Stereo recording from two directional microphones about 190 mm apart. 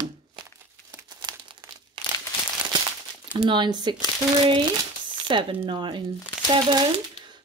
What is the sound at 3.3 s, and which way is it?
Speech, 25° right (ahead or behind).